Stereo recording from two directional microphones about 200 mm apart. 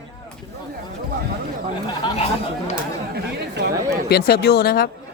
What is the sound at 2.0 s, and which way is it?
Speech, 30° left (ahead or behind).